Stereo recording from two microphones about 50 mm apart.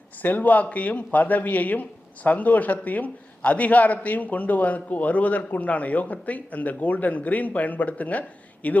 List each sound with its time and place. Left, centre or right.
0.2 s a man's voice: left